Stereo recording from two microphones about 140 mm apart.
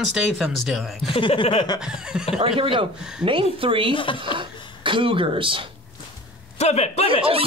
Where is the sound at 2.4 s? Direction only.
40° right (ahead or behind).